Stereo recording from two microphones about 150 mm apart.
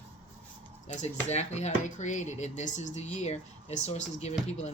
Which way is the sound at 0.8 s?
50° left (ahead or behind).